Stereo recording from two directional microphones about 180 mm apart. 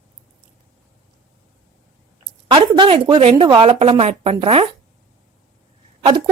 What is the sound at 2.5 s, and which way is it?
A woman's voice, 30° right (ahead or behind).